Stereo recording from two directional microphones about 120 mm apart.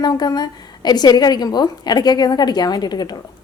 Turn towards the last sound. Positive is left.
turn(degrees=35)  # may be behind; listen again after turning